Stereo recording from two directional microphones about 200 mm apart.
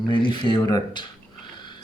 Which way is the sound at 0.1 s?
25° left (ahead or behind).